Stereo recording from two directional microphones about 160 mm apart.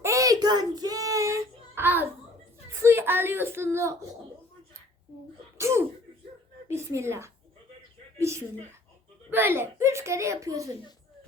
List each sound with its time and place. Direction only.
0.0 s child singing: 20° right (ahead or behind)
2.6 s a woman's voice: 15° right (ahead or behind)
5.5 s a woman's voice: 15° right (ahead or behind)